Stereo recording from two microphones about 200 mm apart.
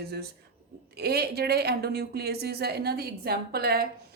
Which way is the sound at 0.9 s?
50° right (ahead or behind).